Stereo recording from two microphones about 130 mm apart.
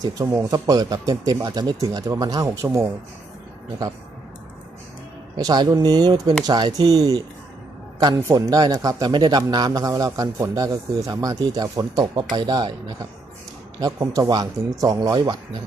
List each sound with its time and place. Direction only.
0.0 s a man's voice: 25° right (ahead or behind)
5.4 s a man's voice: 30° right (ahead or behind)
13.7 s a man's voice: 25° right (ahead or behind)